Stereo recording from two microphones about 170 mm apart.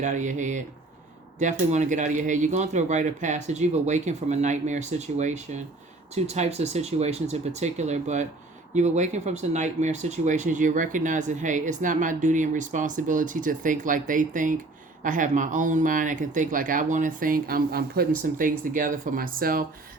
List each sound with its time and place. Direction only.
0.0 s speech: 45° right (ahead or behind)